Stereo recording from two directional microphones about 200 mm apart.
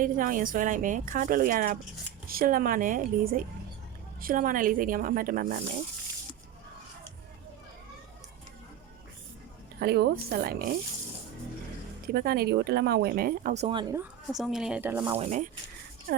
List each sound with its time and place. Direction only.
0.0 s speech: 45° right (ahead or behind)
9.8 s speech: 50° right (ahead or behind)
12.0 s speech: 45° right (ahead or behind); by 13.9 s 25° right (ahead or behind)
14.3 s speech: centre (ahead or behind)
15.0 s speech: 30° right (ahead or behind)